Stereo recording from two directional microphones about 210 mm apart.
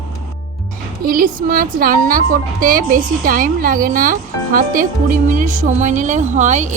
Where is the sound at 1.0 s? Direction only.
40° right (ahead or behind).